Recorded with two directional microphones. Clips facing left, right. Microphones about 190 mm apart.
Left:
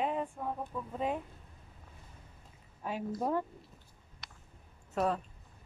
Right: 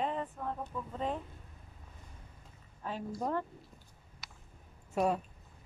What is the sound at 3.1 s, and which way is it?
Speech, 10° left (ahead or behind).